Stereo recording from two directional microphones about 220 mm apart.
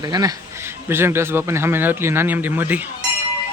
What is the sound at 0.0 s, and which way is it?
Speech, 15° right (ahead or behind).